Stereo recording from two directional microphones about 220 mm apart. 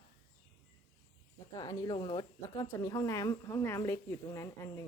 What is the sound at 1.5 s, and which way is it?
Speech, 20° left (ahead or behind).